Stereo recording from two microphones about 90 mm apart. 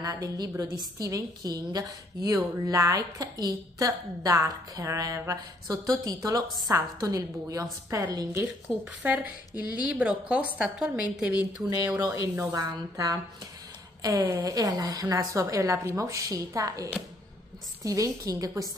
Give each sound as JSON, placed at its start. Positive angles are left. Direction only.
{"t": 0.0, "sound": "a woman's voice", "side_deg": -40}
{"t": 8.3, "sound": "a woman's voice", "side_deg": -25}
{"t": 11.8, "sound": "speech", "side_deg": -45}
{"t": 12.4, "sound": "a woman's voice", "side_deg": -35}